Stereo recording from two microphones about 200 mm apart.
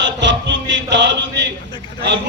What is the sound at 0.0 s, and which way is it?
Speech, 65° right (ahead or behind).